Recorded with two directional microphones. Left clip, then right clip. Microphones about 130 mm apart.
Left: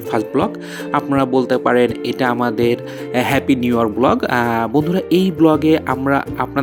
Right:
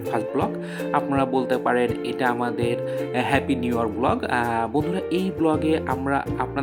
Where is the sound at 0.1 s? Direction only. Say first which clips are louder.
Left 6 dB; 35° left (ahead or behind).